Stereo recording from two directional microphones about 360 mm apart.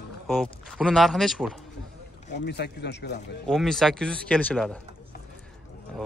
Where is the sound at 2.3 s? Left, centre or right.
Left.